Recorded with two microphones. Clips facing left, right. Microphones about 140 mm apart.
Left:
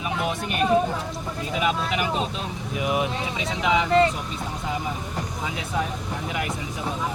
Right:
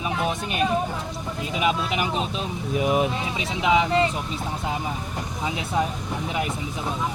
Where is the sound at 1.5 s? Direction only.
20° right (ahead or behind).